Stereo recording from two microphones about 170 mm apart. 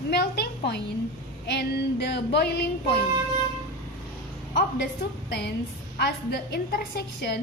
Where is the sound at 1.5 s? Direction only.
75° left (ahead or behind).